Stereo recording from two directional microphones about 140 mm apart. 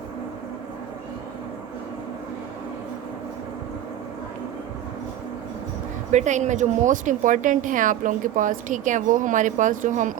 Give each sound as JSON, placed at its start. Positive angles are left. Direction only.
{"t": 6.1, "sound": "speech", "side_deg": -60}